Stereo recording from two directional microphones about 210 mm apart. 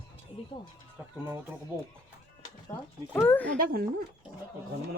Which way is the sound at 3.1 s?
10° left (ahead or behind).